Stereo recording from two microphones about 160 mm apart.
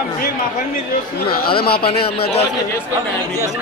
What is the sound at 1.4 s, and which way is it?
Speech, 75° left (ahead or behind).